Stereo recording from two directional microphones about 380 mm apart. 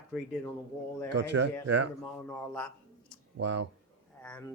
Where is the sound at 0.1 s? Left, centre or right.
Centre.